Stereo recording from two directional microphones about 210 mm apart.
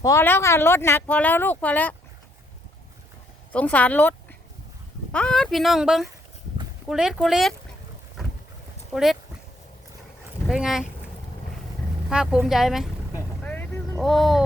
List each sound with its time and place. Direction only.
0.0 s speech: 15° left (ahead or behind)
3.5 s speech: 5° left (ahead or behind)
8.9 s speech: centre (ahead or behind)
10.5 s speech: 5° right (ahead or behind)
12.0 s boat: 5° right (ahead or behind)